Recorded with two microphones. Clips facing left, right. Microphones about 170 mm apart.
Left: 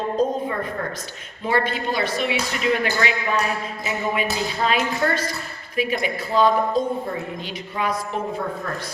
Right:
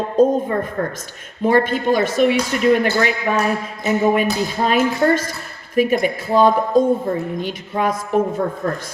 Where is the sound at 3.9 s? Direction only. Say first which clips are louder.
Right 9 dB; 45° right (ahead or behind).